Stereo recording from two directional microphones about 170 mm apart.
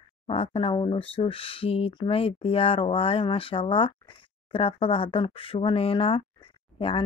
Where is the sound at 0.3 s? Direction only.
35° left (ahead or behind).